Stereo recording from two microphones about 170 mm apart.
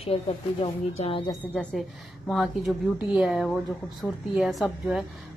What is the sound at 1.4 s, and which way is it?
A woman's voice, 5° left (ahead or behind).